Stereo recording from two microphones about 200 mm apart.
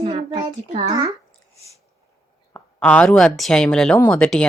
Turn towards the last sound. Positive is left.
turn(degrees=5)  # may be behind; listen again after turning